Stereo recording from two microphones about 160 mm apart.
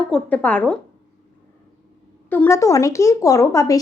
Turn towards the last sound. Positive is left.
turn(degrees=20)  # may be behind; listen again after turning